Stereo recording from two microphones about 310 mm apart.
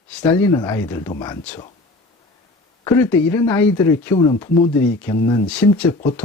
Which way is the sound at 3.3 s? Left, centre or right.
Centre.